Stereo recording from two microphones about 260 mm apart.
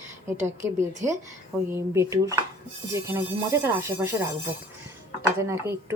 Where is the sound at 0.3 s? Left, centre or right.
Right.